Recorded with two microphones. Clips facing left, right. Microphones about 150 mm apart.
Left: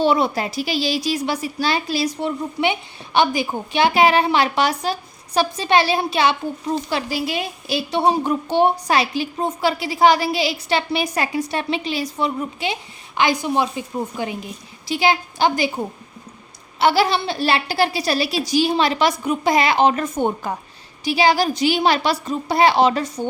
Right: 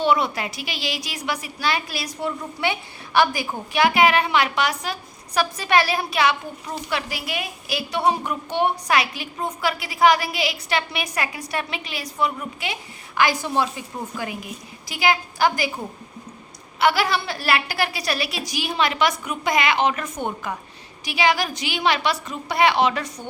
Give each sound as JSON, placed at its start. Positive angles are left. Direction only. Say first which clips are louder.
{"t": 0.0, "sound": "a woman's voice", "louder": "left 3 dB", "side_deg": 35}
{"t": 16.8, "sound": "speech", "louder": "left 3 dB", "side_deg": 30}